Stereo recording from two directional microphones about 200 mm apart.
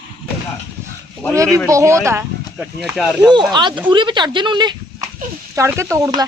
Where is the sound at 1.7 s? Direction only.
15° right (ahead or behind).